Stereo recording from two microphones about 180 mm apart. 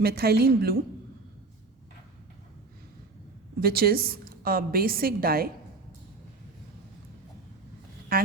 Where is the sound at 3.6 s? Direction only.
55° right (ahead or behind).